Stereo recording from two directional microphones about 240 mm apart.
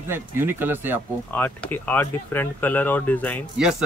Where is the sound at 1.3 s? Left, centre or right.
Centre.